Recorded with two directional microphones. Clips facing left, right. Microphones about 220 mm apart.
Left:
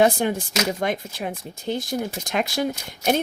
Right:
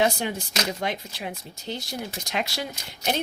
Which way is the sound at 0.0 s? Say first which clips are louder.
Left 5 dB; 50° left (ahead or behind).